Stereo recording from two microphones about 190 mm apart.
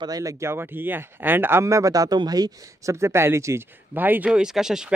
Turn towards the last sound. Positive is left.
turn(degrees=-5)  # may be behind; listen again after turning